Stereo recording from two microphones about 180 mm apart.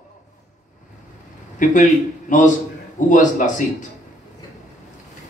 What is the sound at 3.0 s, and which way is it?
Speech, 45° left (ahead or behind).